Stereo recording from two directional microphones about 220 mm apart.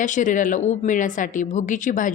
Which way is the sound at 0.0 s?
35° left (ahead or behind).